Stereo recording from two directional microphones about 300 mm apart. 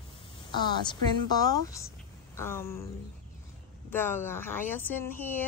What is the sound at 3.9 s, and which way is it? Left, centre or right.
Speech, centre.